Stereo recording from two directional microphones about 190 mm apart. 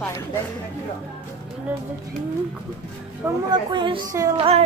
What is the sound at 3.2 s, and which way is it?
Speech, 25° right (ahead or behind).